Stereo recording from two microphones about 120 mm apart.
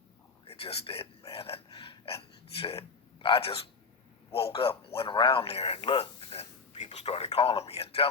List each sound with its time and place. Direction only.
0.4 s a man's voice: 55° left (ahead or behind)